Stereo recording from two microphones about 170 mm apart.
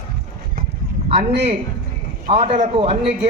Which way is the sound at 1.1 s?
40° right (ahead or behind).